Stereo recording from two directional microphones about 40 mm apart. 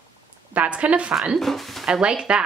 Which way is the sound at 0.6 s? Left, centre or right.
Right.